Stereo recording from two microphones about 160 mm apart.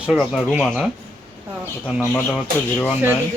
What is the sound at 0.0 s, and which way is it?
Speech, centre (ahead or behind).